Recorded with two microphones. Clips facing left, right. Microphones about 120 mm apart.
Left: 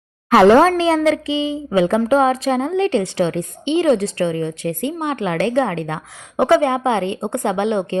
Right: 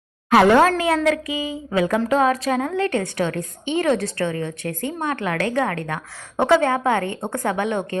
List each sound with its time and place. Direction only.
0.3 s a woman's voice: 30° left (ahead or behind)